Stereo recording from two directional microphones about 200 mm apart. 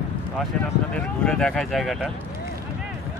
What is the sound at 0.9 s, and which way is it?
Speech, 5° left (ahead or behind).